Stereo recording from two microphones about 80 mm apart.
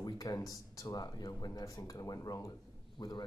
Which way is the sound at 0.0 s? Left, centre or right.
Left.